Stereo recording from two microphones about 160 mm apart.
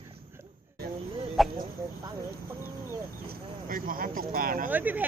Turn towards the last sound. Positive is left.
turn(degrees=-10)  # may be behind; listen again after turning